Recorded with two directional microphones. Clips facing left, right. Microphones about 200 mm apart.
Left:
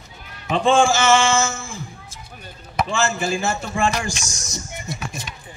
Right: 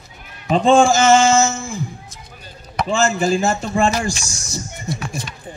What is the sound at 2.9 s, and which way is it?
Music, 40° right (ahead or behind).